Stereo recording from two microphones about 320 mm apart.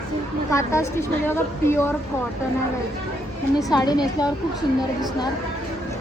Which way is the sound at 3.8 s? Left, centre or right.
Centre.